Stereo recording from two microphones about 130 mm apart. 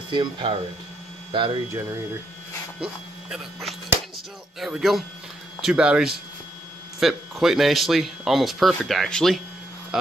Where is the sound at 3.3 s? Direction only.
Centre (ahead or behind).